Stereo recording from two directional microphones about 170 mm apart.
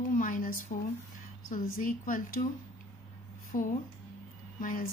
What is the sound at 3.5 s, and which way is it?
A woman's voice, 55° left (ahead or behind).